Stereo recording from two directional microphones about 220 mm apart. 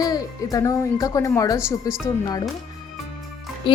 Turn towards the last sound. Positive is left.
turn(degrees=25)  # may be behind; listen again after turning